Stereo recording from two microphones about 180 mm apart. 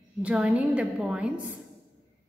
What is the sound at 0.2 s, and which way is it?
A woman's voice, 5° right (ahead or behind).